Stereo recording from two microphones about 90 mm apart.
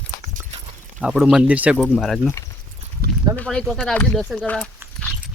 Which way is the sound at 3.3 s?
10° left (ahead or behind).